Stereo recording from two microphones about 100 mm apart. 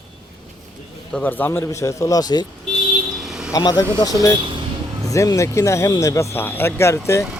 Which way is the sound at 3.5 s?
40° left (ahead or behind).